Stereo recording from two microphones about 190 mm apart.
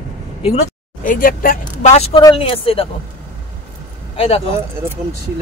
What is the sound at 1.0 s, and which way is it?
Speech, 45° left (ahead or behind).